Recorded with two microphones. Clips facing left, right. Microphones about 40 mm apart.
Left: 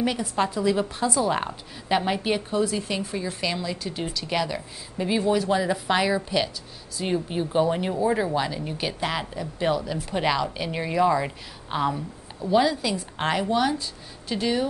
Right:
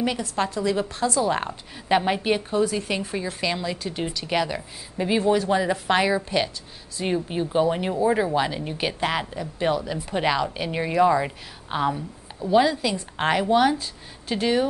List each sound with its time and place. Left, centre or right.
0.0 s a woman's voice: centre
1.3 s a woman's voice: centre
8.5 s a woman's voice: right
13.5 s speech: right
14.3 s a woman's voice: centre